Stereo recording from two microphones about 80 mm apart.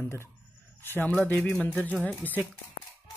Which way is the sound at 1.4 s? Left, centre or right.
Left.